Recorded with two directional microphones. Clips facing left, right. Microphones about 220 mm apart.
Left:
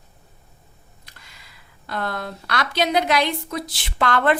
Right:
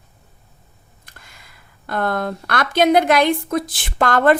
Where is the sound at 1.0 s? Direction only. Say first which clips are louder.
Right 4 dB; 50° right (ahead or behind).